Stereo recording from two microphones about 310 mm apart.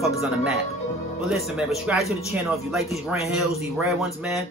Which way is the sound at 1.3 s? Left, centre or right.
Centre.